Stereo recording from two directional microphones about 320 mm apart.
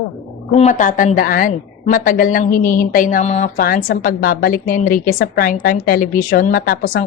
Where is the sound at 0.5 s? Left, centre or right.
Left.